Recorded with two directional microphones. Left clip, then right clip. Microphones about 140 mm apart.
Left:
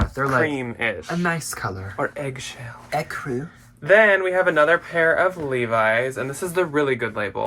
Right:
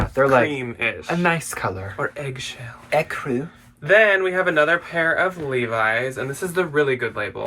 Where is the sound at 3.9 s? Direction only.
35° left (ahead or behind).